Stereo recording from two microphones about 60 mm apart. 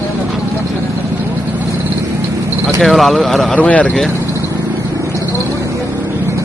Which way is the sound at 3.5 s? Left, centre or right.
Left.